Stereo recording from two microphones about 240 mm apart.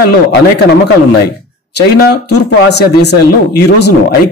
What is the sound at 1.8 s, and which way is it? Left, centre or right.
Speech, left.